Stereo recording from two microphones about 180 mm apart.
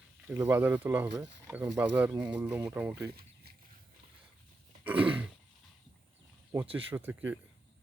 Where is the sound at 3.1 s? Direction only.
60° right (ahead or behind).